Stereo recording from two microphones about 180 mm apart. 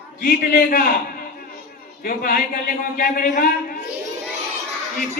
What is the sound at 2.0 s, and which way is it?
A man's voice, 55° left (ahead or behind).